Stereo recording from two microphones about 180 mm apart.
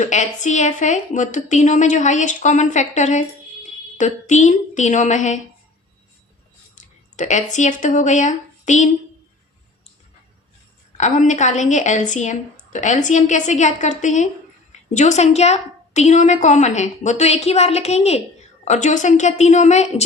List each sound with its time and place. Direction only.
0.0 s a woman's voice: 40° left (ahead or behind)
6.7 s a sound: 40° left (ahead or behind)
7.5 s a woman's voice: 45° left (ahead or behind)
10.9 s a woman's voice: 40° left (ahead or behind)